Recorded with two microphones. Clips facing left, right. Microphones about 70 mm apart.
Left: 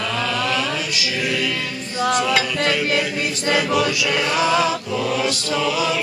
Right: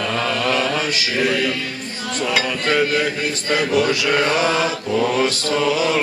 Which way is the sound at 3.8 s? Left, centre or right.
Right.